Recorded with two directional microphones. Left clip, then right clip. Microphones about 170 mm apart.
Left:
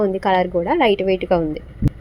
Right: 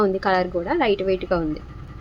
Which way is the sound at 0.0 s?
15° left (ahead or behind).